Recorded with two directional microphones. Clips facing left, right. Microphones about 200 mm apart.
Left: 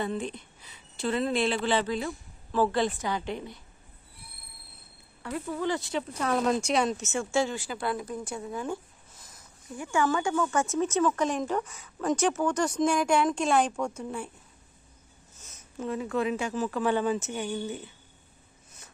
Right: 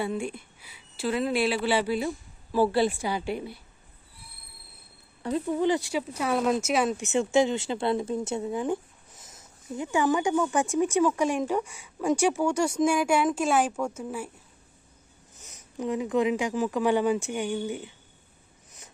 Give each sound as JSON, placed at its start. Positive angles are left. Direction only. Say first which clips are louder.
{"t": 0.0, "sound": "speech", "louder": "right 1 dB", "side_deg": -10}
{"t": 5.2, "sound": "speech", "louder": "right 6 dB", "side_deg": -20}
{"t": 7.0, "sound": "speech", "louder": "right 5 dB", "side_deg": -20}
{"t": 15.4, "sound": "speech", "louder": "right 3 dB", "side_deg": -15}